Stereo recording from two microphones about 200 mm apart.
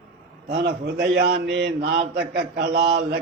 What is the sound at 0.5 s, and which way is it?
A man's voice, 55° right (ahead or behind).